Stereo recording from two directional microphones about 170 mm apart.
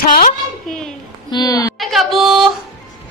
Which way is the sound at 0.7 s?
5° left (ahead or behind).